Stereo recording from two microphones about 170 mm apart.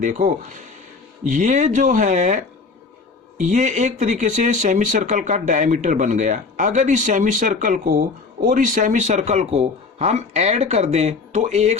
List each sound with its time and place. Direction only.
0.0 s speech: 45° right (ahead or behind)